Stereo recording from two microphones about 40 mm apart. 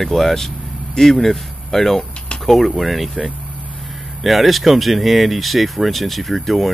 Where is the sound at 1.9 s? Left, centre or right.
Left.